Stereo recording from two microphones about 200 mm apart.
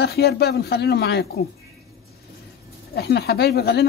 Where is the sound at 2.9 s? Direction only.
55° left (ahead or behind).